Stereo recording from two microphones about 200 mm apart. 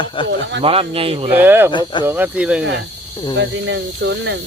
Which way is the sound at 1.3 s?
10° right (ahead or behind).